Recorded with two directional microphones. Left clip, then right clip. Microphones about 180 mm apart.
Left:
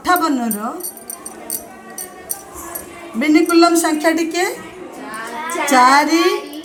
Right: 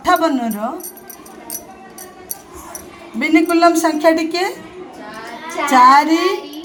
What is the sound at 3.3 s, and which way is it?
Speech, 40° right (ahead or behind).